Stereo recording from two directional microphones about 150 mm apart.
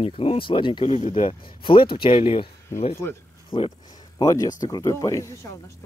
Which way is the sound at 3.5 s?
35° left (ahead or behind).